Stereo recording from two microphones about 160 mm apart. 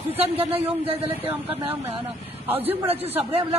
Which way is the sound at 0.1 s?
40° right (ahead or behind).